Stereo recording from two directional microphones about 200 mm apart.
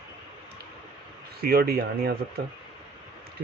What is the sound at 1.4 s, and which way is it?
Speech, 50° right (ahead or behind).